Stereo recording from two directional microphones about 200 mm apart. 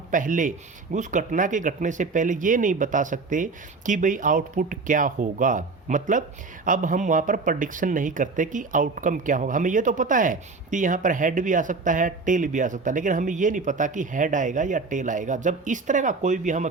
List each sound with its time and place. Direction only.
0.1 s speech: 40° right (ahead or behind)